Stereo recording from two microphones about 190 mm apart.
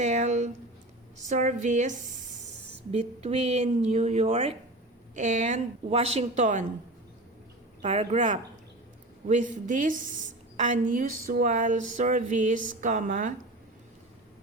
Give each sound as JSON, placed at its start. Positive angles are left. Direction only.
{"t": 0.0, "sound": "a woman's voice", "side_deg": -40}
{"t": 7.8, "sound": "a woman's voice", "side_deg": -35}
{"t": 9.2, "sound": "a sound", "side_deg": -40}